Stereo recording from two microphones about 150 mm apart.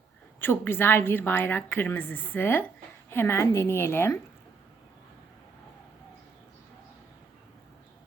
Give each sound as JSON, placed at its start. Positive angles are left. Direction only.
{"t": 0.3, "sound": "a woman's voice", "side_deg": 15}